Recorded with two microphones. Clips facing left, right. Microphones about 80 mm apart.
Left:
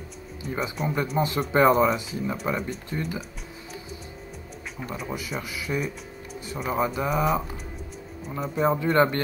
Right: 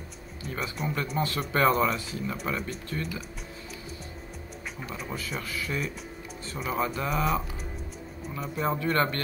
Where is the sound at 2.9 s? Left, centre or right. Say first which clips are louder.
Left 3 dB; centre.